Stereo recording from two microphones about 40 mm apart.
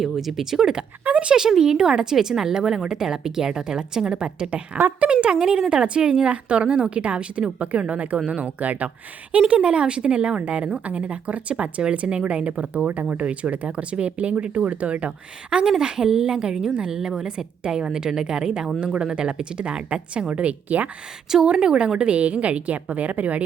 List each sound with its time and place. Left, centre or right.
0.0 s a woman's voice: centre
1.0 s speech: right
1.5 s a woman's voice: centre; by 8.9 s right
9.6 s a woman's voice: right
15.8 s a woman's voice: centre; by 20.9 s right
21.4 s speech: centre
22.1 s a woman's voice: right